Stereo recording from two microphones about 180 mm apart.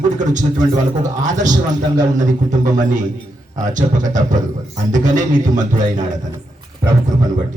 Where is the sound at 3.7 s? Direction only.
45° right (ahead or behind).